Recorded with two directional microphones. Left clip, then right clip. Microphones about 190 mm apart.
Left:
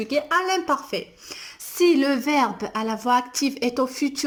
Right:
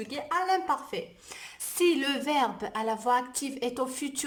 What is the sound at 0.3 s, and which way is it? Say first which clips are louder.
A woman's voice: left 2 dB; 10° left (ahead or behind).